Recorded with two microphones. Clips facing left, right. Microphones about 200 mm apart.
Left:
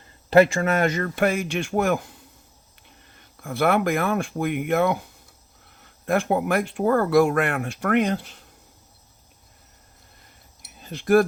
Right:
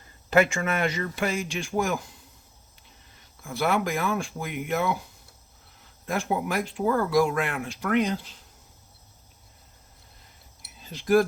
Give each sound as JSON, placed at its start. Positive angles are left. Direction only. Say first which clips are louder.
{"t": 0.3, "sound": "speech", "louder": "left 6 dB", "side_deg": 35}
{"t": 3.2, "sound": "speech", "louder": "left 5 dB", "side_deg": 60}
{"t": 10.6, "sound": "a sound", "louder": "left 6 dB", "side_deg": 55}